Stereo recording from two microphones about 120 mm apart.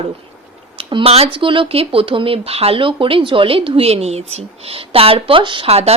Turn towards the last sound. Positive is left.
turn(degrees=-55)  # may be behind; listen again after turning